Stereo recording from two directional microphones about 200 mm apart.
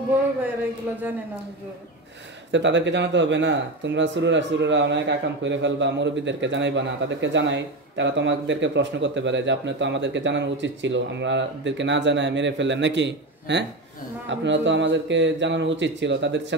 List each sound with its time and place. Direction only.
2.5 s speech: 65° right (ahead or behind)